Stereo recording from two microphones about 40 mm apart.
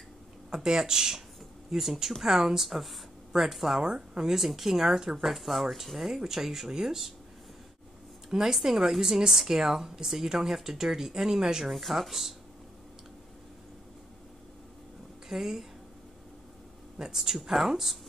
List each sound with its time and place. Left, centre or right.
0.5 s a woman's voice: centre
3.8 s speech: right
4.3 s a woman's voice: centre
8.3 s a woman's voice: centre
11.7 s speech: centre
15.2 s a woman's voice: centre
17.0 s a woman's voice: centre